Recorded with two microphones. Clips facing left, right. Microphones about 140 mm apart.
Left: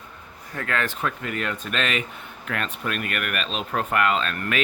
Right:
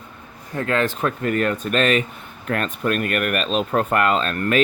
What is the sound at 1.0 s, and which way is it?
Speech, 45° right (ahead or behind).